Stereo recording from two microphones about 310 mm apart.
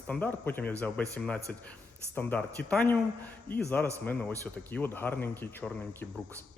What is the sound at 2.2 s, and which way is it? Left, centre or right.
Speech, centre.